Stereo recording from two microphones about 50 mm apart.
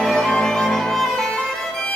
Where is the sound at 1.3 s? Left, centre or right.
Centre.